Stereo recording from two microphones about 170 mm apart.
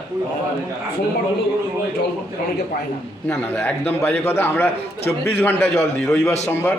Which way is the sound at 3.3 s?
10° left (ahead or behind).